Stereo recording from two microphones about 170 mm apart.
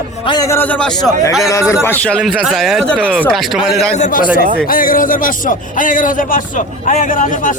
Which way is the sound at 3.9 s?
50° left (ahead or behind).